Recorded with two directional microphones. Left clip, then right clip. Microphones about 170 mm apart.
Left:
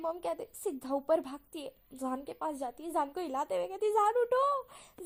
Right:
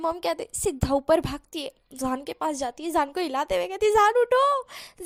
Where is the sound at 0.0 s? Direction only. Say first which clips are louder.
Right 9 dB; 35° right (ahead or behind).